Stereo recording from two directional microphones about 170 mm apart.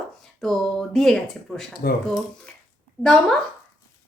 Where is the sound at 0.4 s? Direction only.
Centre (ahead or behind).